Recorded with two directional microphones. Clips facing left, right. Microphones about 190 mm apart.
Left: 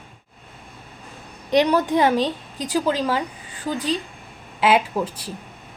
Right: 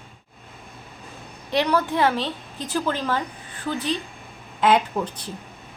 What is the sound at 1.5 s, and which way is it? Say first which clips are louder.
A woman's voice: left 4 dB; 15° left (ahead or behind).